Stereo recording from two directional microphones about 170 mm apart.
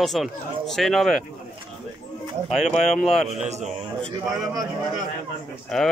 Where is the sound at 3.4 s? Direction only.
40° right (ahead or behind).